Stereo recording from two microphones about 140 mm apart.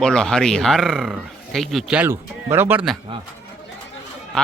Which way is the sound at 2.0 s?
15° right (ahead or behind).